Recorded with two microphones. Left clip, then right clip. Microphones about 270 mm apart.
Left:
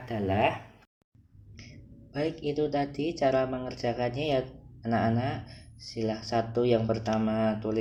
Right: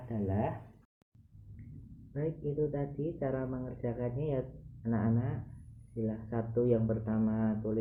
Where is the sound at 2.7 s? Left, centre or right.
Left.